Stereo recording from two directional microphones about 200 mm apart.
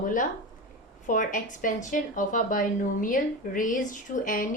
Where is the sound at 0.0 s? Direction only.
40° left (ahead or behind).